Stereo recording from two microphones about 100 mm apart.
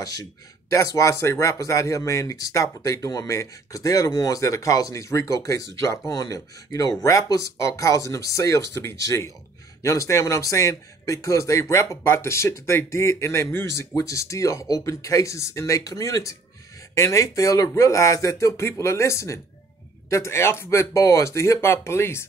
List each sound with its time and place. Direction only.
0.0 s speech: 40° left (ahead or behind)